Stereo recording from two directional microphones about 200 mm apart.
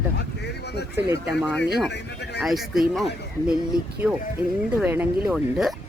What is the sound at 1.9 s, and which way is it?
Speech, 55° left (ahead or behind).